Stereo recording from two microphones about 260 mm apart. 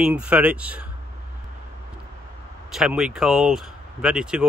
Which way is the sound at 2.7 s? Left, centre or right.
Centre.